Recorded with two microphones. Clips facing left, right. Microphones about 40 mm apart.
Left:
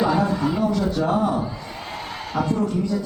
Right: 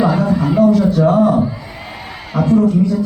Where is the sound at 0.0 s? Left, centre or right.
Centre.